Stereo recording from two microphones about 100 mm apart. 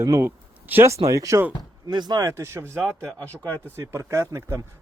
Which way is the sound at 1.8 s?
45° right (ahead or behind).